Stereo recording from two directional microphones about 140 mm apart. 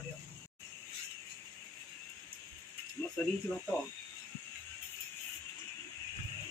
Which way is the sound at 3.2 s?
10° left (ahead or behind).